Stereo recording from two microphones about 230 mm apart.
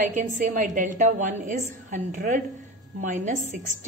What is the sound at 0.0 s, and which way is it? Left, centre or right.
A woman's voice, right.